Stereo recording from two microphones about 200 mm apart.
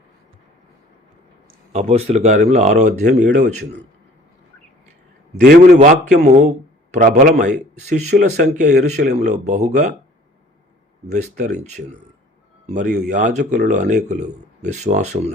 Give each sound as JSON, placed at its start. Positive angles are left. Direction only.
{"t": 1.5, "sound": "speech", "side_deg": -35}
{"t": 5.4, "sound": "speech", "side_deg": -40}
{"t": 11.1, "sound": "speech", "side_deg": -35}
{"t": 12.6, "sound": "a man's voice", "side_deg": -40}